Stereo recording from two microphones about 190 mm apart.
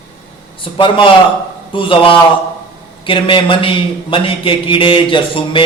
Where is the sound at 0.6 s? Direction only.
25° left (ahead or behind).